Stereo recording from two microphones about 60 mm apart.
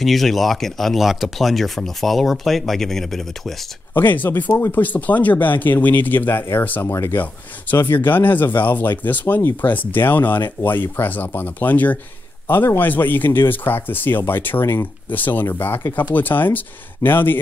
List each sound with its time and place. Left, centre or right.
0.0 s speech: centre
3.9 s a man's voice: left